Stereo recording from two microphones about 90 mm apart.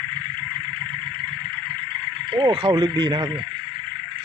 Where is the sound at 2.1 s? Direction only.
60° right (ahead or behind).